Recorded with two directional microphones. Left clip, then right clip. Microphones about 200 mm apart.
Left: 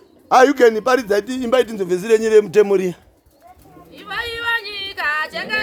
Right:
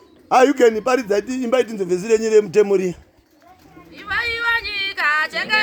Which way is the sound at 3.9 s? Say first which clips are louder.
Right 3 dB; 20° left (ahead or behind).